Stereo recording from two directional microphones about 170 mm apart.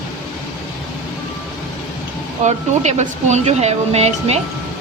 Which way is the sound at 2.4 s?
40° right (ahead or behind).